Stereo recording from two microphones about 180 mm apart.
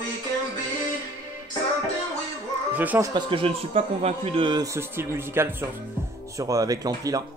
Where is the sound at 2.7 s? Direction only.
10° right (ahead or behind).